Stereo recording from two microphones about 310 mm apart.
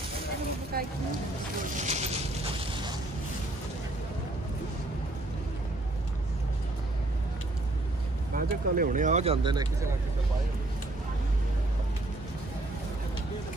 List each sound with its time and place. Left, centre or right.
0.7 s speech: right
1.8 s a sound: right
8.4 s speech: right